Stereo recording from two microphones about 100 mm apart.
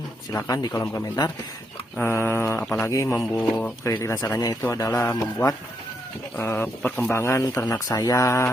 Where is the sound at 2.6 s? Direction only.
10° left (ahead or behind).